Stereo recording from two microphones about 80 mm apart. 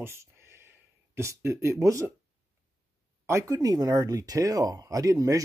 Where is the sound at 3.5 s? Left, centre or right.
Right.